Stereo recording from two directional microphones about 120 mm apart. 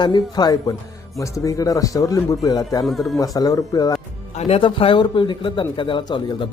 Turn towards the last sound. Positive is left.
turn(degrees=45)  # may be behind; listen again after turning